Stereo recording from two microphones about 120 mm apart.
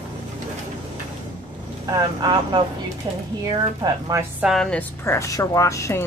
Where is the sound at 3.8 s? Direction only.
25° right (ahead or behind).